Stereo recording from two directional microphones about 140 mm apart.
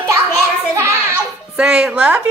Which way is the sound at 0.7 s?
20° right (ahead or behind).